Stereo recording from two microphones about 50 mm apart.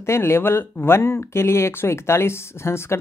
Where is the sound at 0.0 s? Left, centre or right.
Left.